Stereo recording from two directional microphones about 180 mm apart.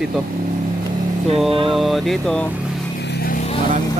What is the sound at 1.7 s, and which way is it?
Speech, centre (ahead or behind).